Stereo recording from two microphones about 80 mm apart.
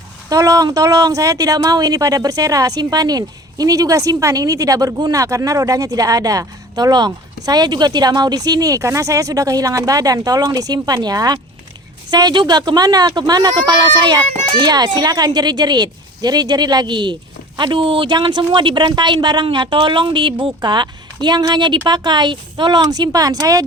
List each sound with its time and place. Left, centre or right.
0.3 s a woman's voice: right
17.6 s speech: right
20.4 s speech: right